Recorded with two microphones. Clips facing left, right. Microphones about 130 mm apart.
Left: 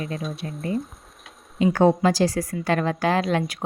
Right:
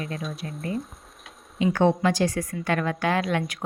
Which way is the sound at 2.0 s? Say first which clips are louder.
Left 3 dB; 35° left (ahead or behind).